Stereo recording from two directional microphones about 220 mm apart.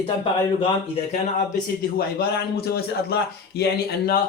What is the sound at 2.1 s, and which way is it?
A man's voice, 45° left (ahead or behind).